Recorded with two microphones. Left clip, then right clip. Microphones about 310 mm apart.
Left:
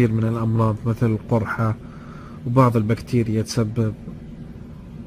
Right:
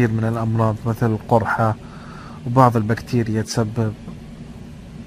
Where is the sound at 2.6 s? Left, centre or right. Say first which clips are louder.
Right 3 dB; centre.